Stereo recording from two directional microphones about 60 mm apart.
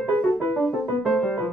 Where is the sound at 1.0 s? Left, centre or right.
Centre.